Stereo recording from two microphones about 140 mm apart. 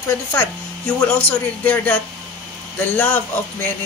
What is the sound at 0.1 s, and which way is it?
Speech, 15° left (ahead or behind).